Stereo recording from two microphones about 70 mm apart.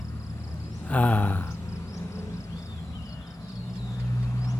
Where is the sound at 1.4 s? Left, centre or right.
Left.